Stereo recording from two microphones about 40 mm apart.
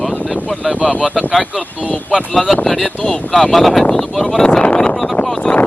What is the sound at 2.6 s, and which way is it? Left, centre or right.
Speech, centre.